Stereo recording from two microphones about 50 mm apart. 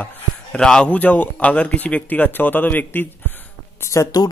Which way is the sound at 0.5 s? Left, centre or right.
Centre.